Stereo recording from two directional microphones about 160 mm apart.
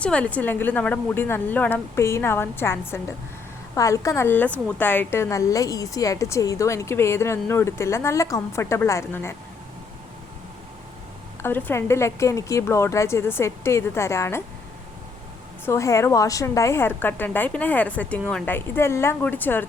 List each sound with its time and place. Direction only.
0.0 s a woman's voice: 10° left (ahead or behind)
11.4 s a woman's voice: 15° left (ahead or behind)
15.6 s a woman's voice: 20° left (ahead or behind)